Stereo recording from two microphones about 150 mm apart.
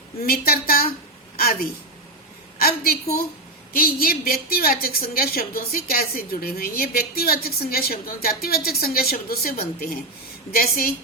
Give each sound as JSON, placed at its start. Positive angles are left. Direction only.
{"t": 0.2, "sound": "a woman's voice", "side_deg": 90}
{"t": 2.6, "sound": "a woman's voice", "side_deg": 90}